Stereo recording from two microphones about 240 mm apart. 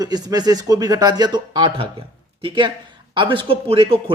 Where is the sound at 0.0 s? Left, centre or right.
Centre.